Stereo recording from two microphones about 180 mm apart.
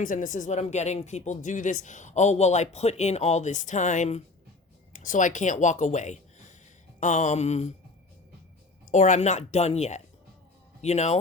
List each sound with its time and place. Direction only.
0.0 s speech: 45° left (ahead or behind)
8.9 s speech: 40° left (ahead or behind)